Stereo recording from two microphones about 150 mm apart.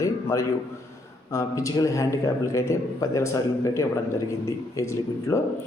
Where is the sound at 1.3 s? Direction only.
20° left (ahead or behind).